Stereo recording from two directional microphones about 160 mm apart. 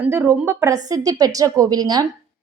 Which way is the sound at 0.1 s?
15° right (ahead or behind).